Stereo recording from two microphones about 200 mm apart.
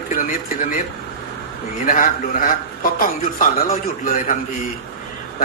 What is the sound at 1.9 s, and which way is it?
A woman's voice, 45° left (ahead or behind).